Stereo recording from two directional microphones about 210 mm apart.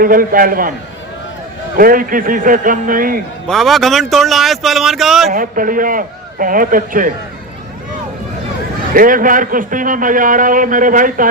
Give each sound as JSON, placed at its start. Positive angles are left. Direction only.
{"t": 0.0, "sound": "a man's voice", "side_deg": -40}
{"t": 1.8, "sound": "a man's voice", "side_deg": -40}
{"t": 3.4, "sound": "speech", "side_deg": 0}
{"t": 5.3, "sound": "a man's voice", "side_deg": -40}
{"t": 8.9, "sound": "a man's voice", "side_deg": -40}